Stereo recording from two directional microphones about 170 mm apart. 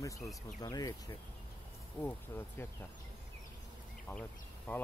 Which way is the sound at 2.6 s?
15° left (ahead or behind).